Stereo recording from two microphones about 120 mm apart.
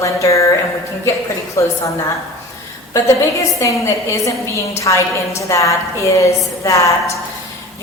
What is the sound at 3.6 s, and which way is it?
A woman's voice, 25° left (ahead or behind).